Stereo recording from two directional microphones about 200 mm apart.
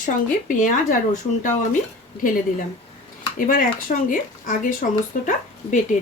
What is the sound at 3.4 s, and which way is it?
Speech, 45° left (ahead or behind).